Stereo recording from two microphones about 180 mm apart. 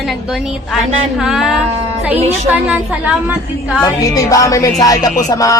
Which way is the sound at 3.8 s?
20° left (ahead or behind).